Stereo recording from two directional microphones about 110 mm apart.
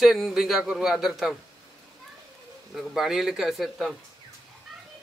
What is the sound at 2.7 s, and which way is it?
Speech, 5° right (ahead or behind).